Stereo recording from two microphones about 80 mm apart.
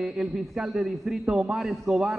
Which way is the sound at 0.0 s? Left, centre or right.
Centre.